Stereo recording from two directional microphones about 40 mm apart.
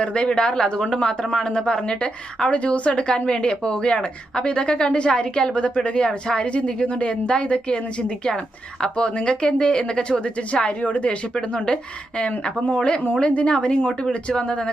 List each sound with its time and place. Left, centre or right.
0.0 s a woman's voice: left
11.4 s a woman's voice: left